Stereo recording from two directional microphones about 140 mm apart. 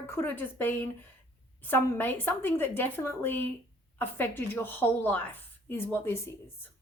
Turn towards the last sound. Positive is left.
turn(degrees=15)  # may be behind; listen again after turning